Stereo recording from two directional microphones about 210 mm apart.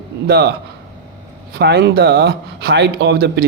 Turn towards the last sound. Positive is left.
turn(degrees=-50)  # may be behind; listen again after turning